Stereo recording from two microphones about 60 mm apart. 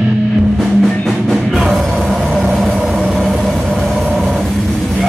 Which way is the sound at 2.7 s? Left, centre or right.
Centre.